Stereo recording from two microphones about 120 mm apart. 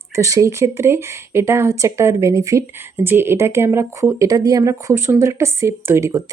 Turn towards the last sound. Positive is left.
turn(degrees=-25)  # may be behind; listen again after turning